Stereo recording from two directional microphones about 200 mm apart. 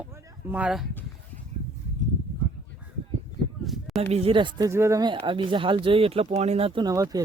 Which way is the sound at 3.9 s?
30° right (ahead or behind).